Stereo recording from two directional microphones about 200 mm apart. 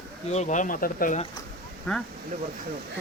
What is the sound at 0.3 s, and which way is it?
Speech, 35° left (ahead or behind).